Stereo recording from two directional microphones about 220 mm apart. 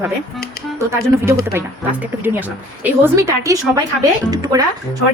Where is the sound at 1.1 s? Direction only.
10° right (ahead or behind).